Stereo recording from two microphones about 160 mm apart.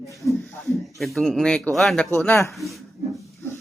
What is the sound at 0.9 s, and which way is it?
Speech, centre (ahead or behind).